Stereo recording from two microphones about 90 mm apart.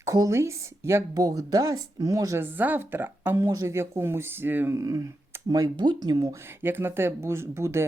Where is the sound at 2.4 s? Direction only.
20° right (ahead or behind).